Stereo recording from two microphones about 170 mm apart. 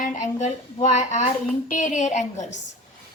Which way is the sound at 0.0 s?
45° left (ahead or behind).